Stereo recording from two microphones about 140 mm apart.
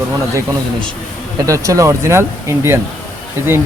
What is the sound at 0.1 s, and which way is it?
Speech, 15° right (ahead or behind).